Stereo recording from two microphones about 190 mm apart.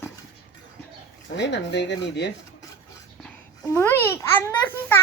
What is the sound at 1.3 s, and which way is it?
Speech, 65° left (ahead or behind).